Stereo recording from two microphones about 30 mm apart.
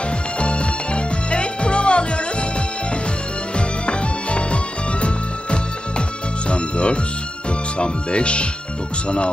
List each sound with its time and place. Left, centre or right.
0.3 s music: left
3.5 s music: left
7.8 s speech: left